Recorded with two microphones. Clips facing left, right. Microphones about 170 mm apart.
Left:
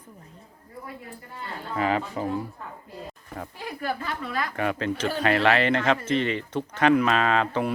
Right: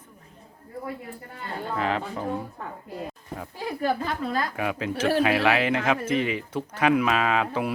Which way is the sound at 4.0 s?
35° right (ahead or behind).